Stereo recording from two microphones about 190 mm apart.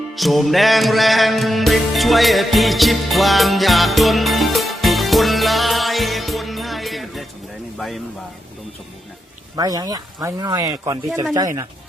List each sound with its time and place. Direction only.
0.2 s music: centre (ahead or behind)
7.8 s a sound: centre (ahead or behind)
9.6 s speech: 20° right (ahead or behind)